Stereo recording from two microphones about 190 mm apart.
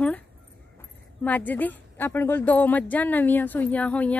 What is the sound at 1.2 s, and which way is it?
A woman's voice, 10° left (ahead or behind).